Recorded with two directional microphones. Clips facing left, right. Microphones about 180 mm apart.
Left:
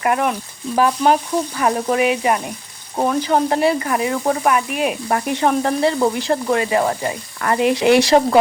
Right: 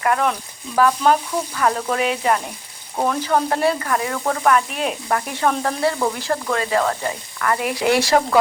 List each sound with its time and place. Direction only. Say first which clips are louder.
0.0 s sizzle: left 1 dB; 20° left (ahead or behind)
0.8 s frying: left 1 dB; 20° left (ahead or behind)
1.5 s sizzle: left 2 dB; 15° left (ahead or behind)
5.0 s frying: left 1 dB; 20° left (ahead or behind)